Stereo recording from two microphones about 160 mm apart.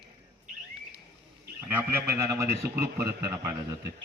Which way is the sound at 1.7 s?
15° right (ahead or behind).